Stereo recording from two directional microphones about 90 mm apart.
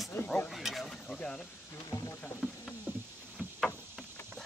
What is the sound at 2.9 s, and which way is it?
Rowboat, 20° right (ahead or behind).